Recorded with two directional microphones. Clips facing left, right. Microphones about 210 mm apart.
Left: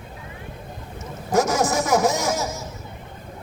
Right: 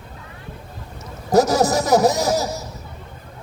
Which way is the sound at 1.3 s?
35° right (ahead or behind).